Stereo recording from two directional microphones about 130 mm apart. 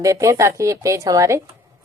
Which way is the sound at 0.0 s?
25° right (ahead or behind).